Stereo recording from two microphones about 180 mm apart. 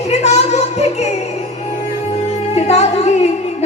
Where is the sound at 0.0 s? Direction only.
40° left (ahead or behind).